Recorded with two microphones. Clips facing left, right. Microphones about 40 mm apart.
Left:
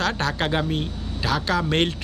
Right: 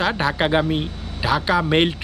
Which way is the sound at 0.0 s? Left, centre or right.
Centre.